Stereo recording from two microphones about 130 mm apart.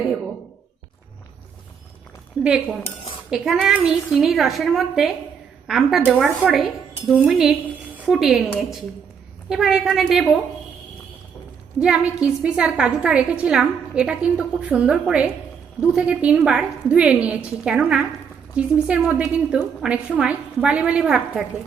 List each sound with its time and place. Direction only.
2.4 s a woman's voice: 5° right (ahead or behind)
2.8 s cutlery: 45° left (ahead or behind)
3.2 s a woman's voice: 5° right (ahead or behind)
11.8 s a woman's voice: 5° right (ahead or behind)